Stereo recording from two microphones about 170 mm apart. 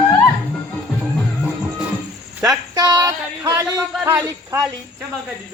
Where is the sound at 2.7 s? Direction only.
20° right (ahead or behind).